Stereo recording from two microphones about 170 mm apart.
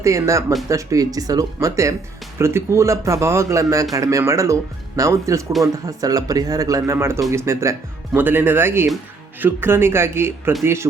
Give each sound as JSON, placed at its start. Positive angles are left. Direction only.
{"t": 0.0, "sound": "speech", "side_deg": -20}